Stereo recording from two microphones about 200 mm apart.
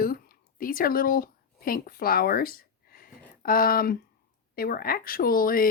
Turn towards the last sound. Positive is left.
turn(degrees=45)  # may be behind; listen again after turning